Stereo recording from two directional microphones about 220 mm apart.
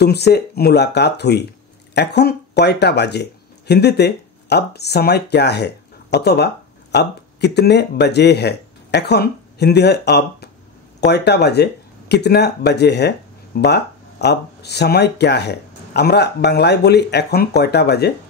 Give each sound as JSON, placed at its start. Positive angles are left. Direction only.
{"t": 0.0, "sound": "speech", "side_deg": 50}